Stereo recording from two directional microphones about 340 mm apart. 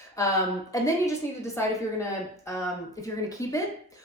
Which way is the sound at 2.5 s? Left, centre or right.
Centre.